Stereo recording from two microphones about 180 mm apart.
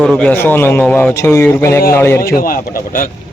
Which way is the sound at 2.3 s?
50° left (ahead or behind).